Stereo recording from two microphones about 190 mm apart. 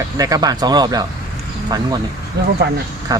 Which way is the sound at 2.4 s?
60° right (ahead or behind).